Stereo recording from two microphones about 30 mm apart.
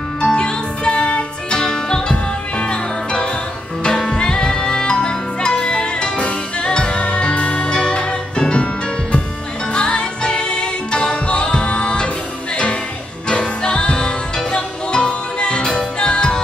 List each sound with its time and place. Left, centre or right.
0.2 s music: left
1.6 s music: left
7.7 s music: left
9.7 s music: left
13.3 s music: left